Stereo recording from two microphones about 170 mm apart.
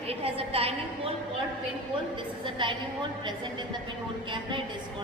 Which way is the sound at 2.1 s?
30° right (ahead or behind).